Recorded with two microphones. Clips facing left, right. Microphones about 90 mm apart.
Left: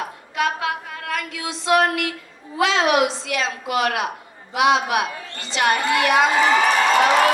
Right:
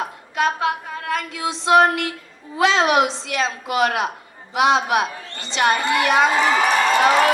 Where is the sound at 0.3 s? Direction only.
30° right (ahead or behind).